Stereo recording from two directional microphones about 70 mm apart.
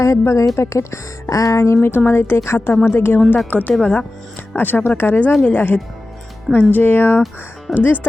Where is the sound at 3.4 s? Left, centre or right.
Left.